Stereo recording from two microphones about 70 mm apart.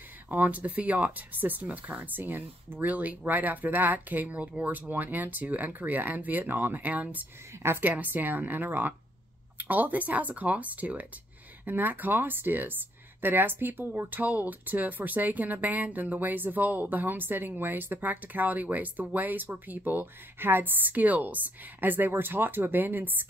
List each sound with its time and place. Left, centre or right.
0.3 s speech: right